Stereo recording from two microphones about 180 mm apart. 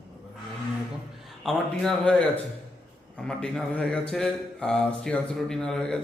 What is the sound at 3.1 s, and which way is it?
A man's voice, 5° left (ahead or behind).